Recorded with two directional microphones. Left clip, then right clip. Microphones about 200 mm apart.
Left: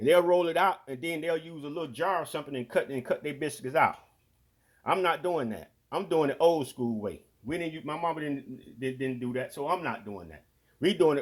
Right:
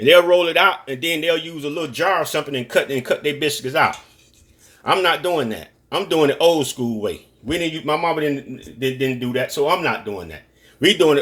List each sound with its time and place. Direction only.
0.0 s speech: 35° left (ahead or behind)
10.8 s a man's voice: 35° left (ahead or behind)